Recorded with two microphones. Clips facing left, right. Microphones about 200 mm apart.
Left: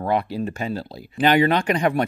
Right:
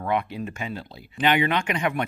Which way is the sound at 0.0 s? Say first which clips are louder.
Left 4 dB; 35° left (ahead or behind).